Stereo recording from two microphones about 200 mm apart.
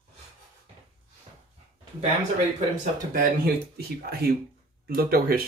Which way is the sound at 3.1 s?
45° right (ahead or behind).